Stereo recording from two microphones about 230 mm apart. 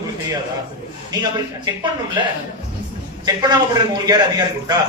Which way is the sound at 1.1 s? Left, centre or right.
Centre.